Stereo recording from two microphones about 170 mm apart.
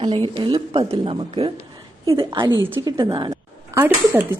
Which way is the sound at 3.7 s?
10° right (ahead or behind).